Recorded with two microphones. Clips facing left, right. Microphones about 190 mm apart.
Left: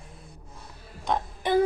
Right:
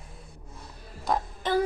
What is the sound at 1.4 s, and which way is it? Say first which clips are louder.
Speech: left 3 dB; 15° left (ahead or behind).